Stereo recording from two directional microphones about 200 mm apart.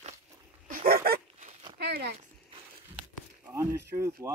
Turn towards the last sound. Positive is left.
turn(degrees=-15)  # may be behind; listen again after turning